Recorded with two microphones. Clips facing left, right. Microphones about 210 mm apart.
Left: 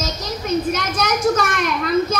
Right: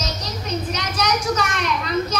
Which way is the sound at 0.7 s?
50° left (ahead or behind).